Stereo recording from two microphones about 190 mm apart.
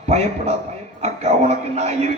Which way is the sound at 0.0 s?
35° right (ahead or behind).